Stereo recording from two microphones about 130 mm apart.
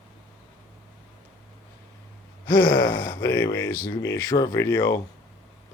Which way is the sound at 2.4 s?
35° left (ahead or behind).